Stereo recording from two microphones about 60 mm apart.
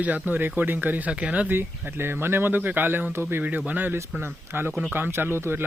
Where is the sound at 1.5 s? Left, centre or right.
Right.